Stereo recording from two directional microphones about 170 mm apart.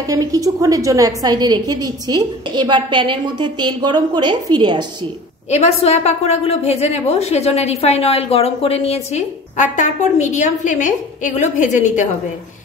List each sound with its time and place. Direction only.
0.0 s a woman's voice: 20° right (ahead or behind)
5.5 s a woman's voice: 40° left (ahead or behind)